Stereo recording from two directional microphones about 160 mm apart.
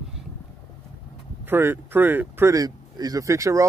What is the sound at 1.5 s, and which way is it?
Speech, 15° right (ahead or behind).